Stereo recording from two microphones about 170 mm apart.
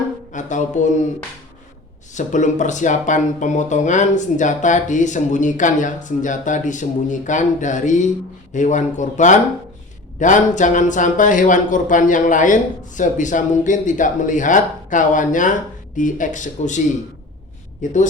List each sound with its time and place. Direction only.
0.3 s speech: 45° left (ahead or behind)
2.1 s speech: 45° left (ahead or behind)
17.8 s speech: 45° left (ahead or behind)